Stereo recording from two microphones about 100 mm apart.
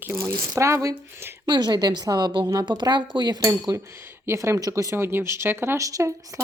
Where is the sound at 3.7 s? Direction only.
30° right (ahead or behind).